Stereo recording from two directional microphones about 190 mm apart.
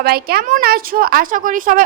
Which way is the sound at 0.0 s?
55° right (ahead or behind).